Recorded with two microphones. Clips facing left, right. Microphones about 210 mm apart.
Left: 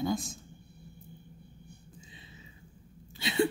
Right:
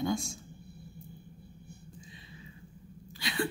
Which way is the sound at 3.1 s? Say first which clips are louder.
Left 6 dB; 25° left (ahead or behind).